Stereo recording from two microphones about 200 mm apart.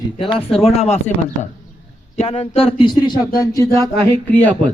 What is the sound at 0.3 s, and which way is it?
Speech, 30° left (ahead or behind).